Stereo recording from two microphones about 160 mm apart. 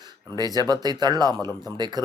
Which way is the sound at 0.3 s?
25° right (ahead or behind).